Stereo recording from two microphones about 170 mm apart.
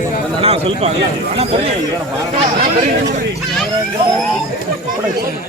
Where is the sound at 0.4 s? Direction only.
35° right (ahead or behind).